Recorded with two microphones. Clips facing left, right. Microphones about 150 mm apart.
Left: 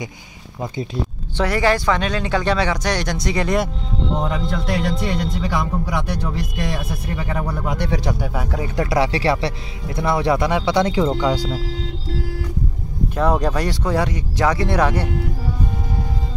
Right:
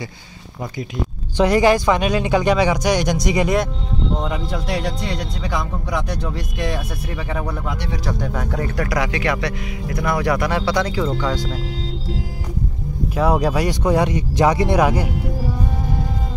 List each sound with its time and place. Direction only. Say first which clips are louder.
1.3 s speech: right 4 dB; 15° right (ahead or behind)
7.2 s speech: even; centre (ahead or behind)
8.7 s speech: left 5 dB; 25° left (ahead or behind)
13.1 s speech: right 1 dB; 5° right (ahead or behind)